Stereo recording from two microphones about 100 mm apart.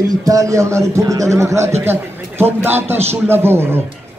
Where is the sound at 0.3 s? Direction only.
35° right (ahead or behind).